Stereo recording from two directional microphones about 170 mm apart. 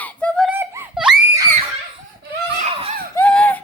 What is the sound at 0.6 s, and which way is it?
Screaming, 5° right (ahead or behind).